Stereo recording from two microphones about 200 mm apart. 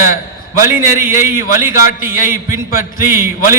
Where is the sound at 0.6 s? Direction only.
15° right (ahead or behind).